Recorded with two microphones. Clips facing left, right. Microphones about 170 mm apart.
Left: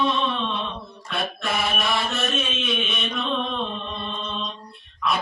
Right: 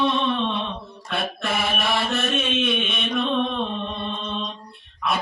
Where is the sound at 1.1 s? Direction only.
55° right (ahead or behind).